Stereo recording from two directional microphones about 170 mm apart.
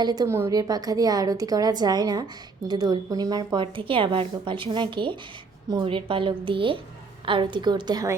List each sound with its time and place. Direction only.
0.0 s a woman's voice: 20° right (ahead or behind)